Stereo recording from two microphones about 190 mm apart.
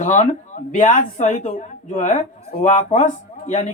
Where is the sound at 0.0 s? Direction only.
40° left (ahead or behind).